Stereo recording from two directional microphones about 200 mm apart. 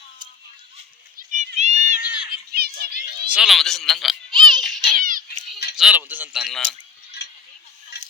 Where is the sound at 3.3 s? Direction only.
Centre (ahead or behind).